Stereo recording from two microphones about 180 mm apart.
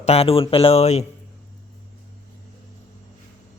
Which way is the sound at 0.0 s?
35° left (ahead or behind).